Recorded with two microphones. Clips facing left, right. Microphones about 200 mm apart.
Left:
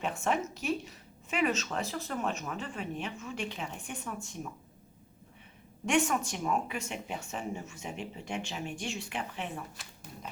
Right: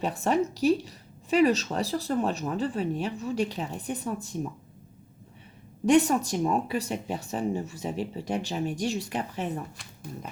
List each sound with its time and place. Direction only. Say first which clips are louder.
0.0 s speech: right 6 dB; 35° right (ahead or behind)
5.8 s speech: right 8 dB; 35° right (ahead or behind)
9.8 s speech: right 2 dB; 5° left (ahead or behind)